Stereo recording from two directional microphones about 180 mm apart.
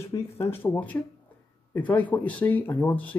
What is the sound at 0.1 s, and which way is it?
Speech, 10° left (ahead or behind).